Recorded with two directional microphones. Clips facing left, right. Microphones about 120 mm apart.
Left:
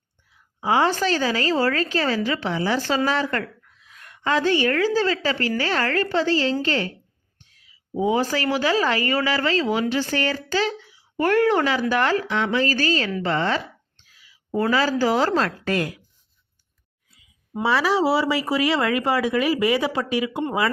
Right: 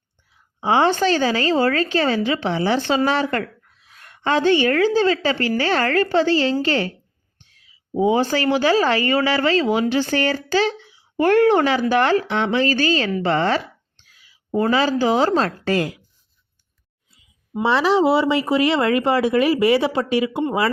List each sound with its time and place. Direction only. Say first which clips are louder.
0.6 s a woman's voice: right 3 dB; 25° right (ahead or behind)
7.9 s a woman's voice: right 3 dB; 25° right (ahead or behind)
14.6 s a woman's voice: right 2 dB; 25° right (ahead or behind)
17.6 s a woman's voice: right 3 dB; 20° right (ahead or behind)